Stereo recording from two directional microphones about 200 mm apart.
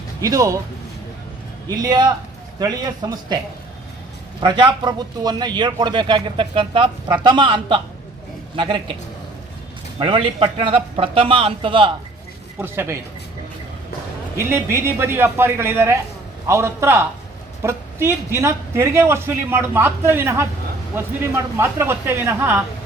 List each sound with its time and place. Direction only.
0.2 s a man's voice: 15° right (ahead or behind)
1.6 s a man's voice: 20° right (ahead or behind)
4.4 s a man's voice: 25° right (ahead or behind)
10.0 s a man's voice: 25° right (ahead or behind)
12.5 s a man's voice: 10° right (ahead or behind)
14.3 s a man's voice: 10° right (ahead or behind)